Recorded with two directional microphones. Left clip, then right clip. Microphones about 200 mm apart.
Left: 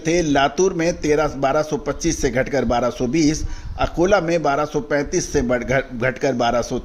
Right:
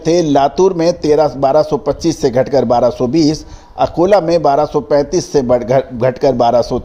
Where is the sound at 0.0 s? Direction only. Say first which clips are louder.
Right 6 dB; 20° right (ahead or behind).